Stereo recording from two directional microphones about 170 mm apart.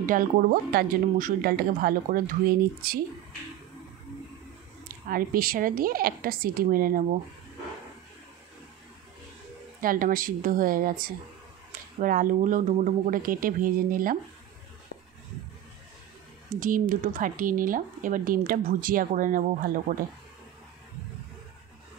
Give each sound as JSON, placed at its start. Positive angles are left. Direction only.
{"t": 0.0, "sound": "speech", "side_deg": -50}
{"t": 4.8, "sound": "speech", "side_deg": -55}
{"t": 9.8, "sound": "speech", "side_deg": -55}
{"t": 16.5, "sound": "speech", "side_deg": -50}